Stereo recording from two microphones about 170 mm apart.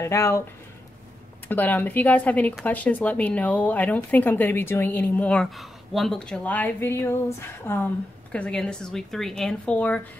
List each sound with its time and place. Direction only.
0.0 s speech: 15° left (ahead or behind)
1.5 s a woman's voice: 10° left (ahead or behind)